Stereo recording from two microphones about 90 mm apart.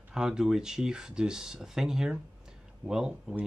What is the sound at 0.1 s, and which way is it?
Speech, 5° right (ahead or behind).